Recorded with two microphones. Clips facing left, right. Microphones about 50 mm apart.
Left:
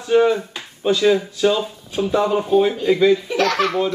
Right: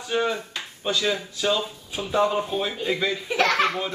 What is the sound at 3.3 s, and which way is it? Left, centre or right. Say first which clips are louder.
Speech: left 3 dB; right.